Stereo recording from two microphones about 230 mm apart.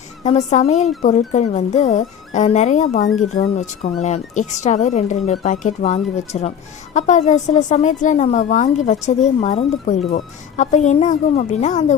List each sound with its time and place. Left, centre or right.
0.2 s a woman's voice: left